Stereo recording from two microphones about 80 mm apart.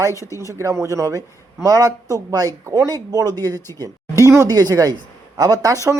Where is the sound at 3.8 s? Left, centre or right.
Right.